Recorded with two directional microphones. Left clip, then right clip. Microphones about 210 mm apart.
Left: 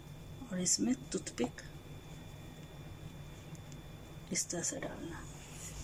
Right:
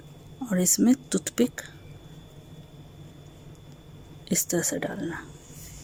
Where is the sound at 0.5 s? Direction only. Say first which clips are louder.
Right 11 dB; 55° right (ahead or behind).